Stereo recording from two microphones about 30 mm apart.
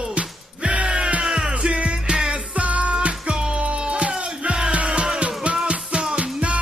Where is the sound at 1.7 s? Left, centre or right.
Right.